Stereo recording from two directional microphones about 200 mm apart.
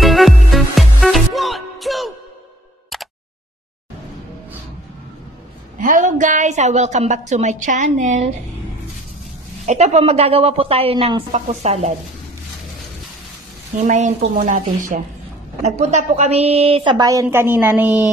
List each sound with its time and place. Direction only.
0.0 s music: centre (ahead or behind)
5.8 s a woman's voice: 40° right (ahead or behind)
9.7 s a woman's voice: 35° right (ahead or behind)
13.7 s a woman's voice: 40° right (ahead or behind); by 18.0 s 10° right (ahead or behind)